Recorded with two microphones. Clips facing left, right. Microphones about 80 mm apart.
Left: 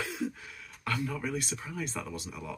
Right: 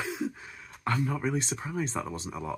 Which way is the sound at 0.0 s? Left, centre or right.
Right.